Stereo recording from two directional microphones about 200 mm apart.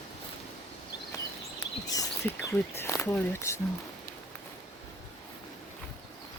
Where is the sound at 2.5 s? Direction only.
15° left (ahead or behind).